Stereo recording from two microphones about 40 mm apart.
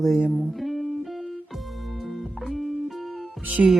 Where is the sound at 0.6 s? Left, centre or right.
Centre.